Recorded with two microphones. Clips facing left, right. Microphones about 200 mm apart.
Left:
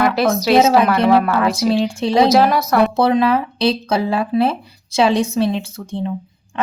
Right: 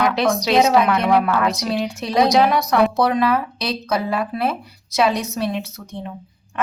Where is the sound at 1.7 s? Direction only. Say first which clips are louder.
Left 4 dB; 30° left (ahead or behind).